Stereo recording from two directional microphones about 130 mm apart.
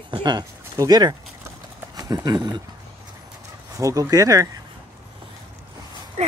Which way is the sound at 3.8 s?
25° right (ahead or behind).